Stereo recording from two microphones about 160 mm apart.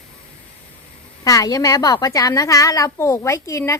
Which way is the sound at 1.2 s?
20° left (ahead or behind).